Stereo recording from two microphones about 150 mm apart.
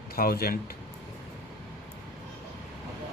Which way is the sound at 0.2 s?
85° left.